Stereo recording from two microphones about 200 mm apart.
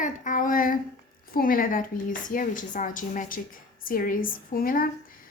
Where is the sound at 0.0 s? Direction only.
40° left (ahead or behind).